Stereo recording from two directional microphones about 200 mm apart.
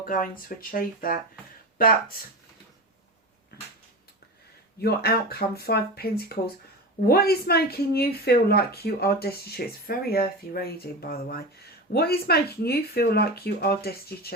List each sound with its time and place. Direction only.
0.0 s speech: 45° left (ahead or behind)
3.5 s a sound: 50° left (ahead or behind)
4.8 s speech: 50° left (ahead or behind)